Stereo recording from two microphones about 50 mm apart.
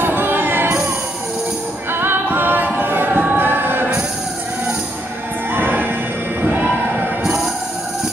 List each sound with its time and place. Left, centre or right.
0.0 s music: right
1.9 s music: right
5.5 s music: right